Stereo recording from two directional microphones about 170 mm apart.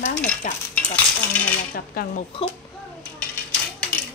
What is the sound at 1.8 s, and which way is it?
Speech, 55° left (ahead or behind).